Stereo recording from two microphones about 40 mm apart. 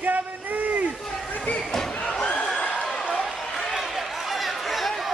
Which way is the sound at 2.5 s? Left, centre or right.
Centre.